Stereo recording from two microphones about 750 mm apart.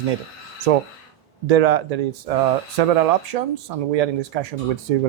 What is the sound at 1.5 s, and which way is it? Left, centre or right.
Speech, right.